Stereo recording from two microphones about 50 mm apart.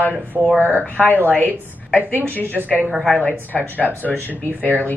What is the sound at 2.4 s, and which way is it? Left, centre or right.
Speech, right.